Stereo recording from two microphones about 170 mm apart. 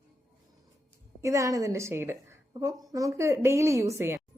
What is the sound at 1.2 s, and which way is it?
A woman's voice, 15° right (ahead or behind).